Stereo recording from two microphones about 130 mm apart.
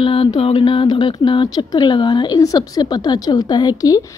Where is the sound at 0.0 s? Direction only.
45° left (ahead or behind).